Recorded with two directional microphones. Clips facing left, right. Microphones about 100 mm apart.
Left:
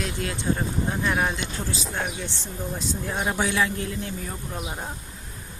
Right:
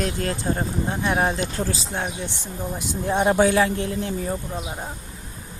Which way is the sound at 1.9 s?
25° right (ahead or behind).